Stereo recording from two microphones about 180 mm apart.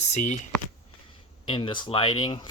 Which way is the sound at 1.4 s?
30° left (ahead or behind).